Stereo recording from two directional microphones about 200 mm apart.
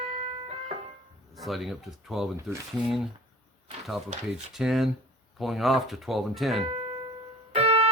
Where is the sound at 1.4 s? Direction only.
Centre (ahead or behind).